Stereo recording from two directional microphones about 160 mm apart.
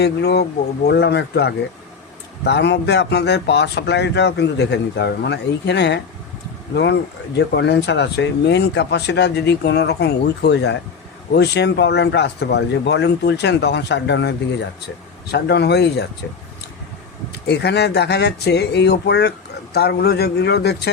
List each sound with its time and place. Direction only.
0.0 s speech: 90° left
17.4 s speech: 90° left